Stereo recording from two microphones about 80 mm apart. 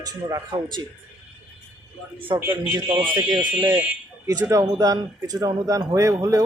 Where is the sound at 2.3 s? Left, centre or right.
Right.